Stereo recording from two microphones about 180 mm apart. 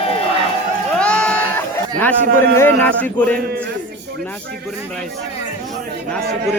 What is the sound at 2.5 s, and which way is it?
Speech, 10° left (ahead or behind).